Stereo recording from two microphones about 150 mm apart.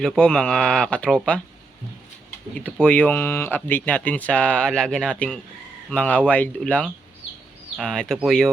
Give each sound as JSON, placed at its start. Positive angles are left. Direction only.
{"t": 0.0, "sound": "speech", "side_deg": 5}
{"t": 2.6, "sound": "speech", "side_deg": 10}